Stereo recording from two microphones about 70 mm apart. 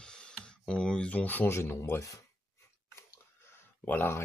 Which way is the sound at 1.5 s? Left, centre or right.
Left.